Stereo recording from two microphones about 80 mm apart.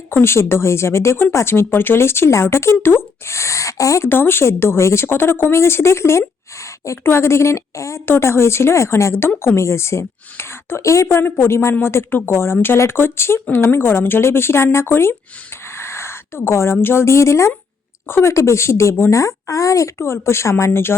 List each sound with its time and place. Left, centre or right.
0.1 s a woman's voice: left
4.1 s a woman's voice: left
15.8 s a sound: left
16.8 s a woman's voice: left